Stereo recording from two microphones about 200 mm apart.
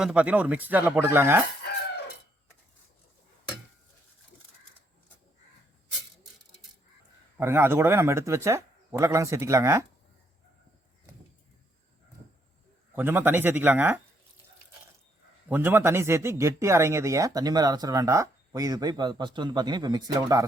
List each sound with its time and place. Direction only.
0.0 s speech: 5° right (ahead or behind)
7.3 s speech: 10° right (ahead or behind)
13.0 s speech: 10° right (ahead or behind)
15.4 s speech: 10° right (ahead or behind)